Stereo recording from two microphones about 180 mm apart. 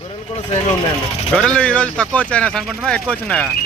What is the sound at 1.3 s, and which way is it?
Speech, 5° left (ahead or behind).